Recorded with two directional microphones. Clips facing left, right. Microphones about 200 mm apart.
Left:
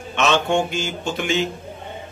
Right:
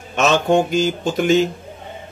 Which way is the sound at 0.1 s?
40° right (ahead or behind).